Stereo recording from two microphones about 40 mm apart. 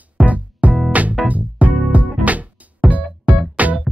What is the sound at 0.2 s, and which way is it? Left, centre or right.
Music, right.